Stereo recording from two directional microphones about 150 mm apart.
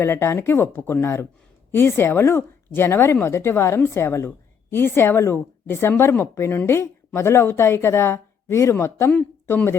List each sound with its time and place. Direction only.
0.0 s speech: 15° left (ahead or behind)